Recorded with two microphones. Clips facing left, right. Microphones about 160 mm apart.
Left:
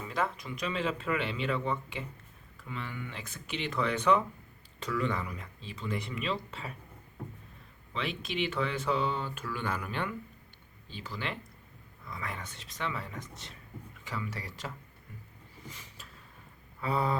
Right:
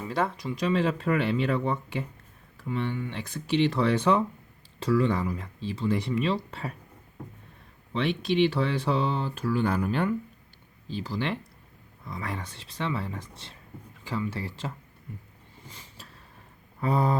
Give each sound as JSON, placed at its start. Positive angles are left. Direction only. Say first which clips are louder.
{"t": 0.1, "sound": "speech", "louder": "right 5 dB", "side_deg": -35}
{"t": 7.9, "sound": "speech", "louder": "right 9 dB", "side_deg": -35}
{"t": 15.7, "sound": "vehicle", "louder": "right 2 dB", "side_deg": -30}
{"t": 16.8, "sound": "speech", "louder": "right 5 dB", "side_deg": -40}